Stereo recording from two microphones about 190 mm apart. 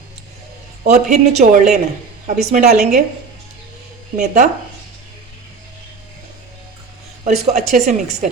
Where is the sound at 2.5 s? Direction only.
55° right (ahead or behind).